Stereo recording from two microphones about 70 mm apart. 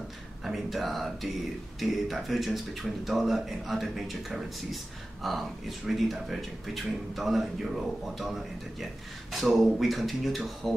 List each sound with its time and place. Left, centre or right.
0.4 s speech: centre